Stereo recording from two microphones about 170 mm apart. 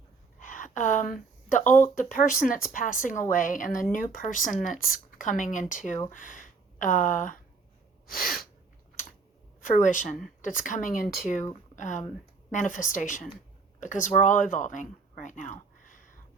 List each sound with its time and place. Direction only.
0.3 s a sound: 50° left (ahead or behind)
2.0 s speech: 50° left (ahead or behind)
8.0 s sneeze: 55° left (ahead or behind)
9.6 s speech: 50° left (ahead or behind)